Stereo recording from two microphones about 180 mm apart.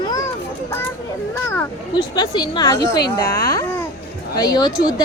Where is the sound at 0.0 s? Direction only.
20° left (ahead or behind).